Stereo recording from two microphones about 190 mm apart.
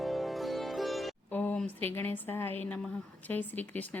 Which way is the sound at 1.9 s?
10° left (ahead or behind).